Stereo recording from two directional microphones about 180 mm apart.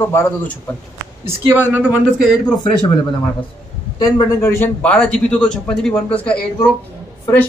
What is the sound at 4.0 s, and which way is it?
Speech, 15° left (ahead or behind).